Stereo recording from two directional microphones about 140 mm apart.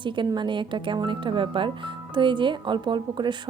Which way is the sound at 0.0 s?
35° right (ahead or behind).